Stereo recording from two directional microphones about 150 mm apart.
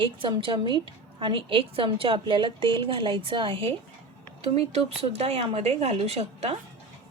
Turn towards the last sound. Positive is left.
turn(degrees=-45)  # may be behind; listen again after turning